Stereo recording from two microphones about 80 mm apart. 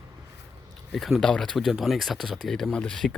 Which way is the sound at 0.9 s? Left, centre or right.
Centre.